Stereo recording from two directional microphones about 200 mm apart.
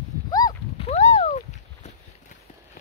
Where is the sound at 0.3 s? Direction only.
20° left (ahead or behind).